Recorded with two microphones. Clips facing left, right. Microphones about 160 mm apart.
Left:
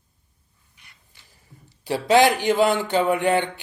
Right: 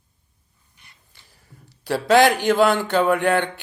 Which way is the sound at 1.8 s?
15° left (ahead or behind).